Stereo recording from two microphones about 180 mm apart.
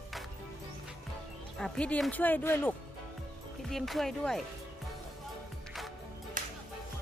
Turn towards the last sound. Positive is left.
turn(degrees=-45)  # may be behind; listen again after turning